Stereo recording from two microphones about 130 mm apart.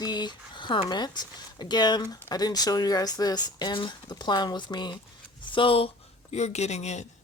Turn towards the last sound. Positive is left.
turn(degrees=60)  # may be behind; listen again after turning